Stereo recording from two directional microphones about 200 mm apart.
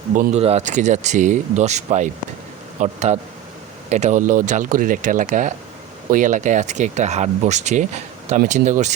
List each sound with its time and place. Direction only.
0.2 s speech: 35° right (ahead or behind)